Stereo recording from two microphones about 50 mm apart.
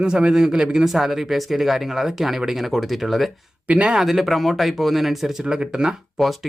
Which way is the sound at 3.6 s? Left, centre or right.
Right.